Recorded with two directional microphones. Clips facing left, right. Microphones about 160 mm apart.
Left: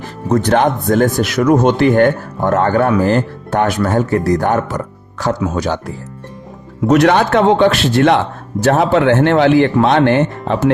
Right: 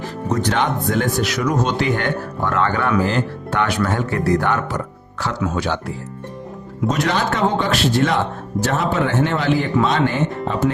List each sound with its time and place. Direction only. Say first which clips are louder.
0.3 s speech: left 8 dB; 50° left (ahead or behind)
6.8 s speech: left 9 dB; 70° left (ahead or behind)